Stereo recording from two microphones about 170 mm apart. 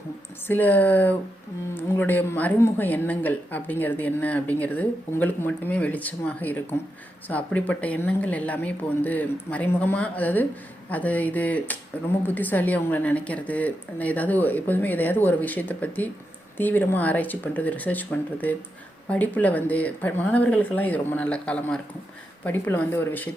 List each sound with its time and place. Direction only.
0.4 s speech: 10° left (ahead or behind)
19.0 s speech: 10° left (ahead or behind)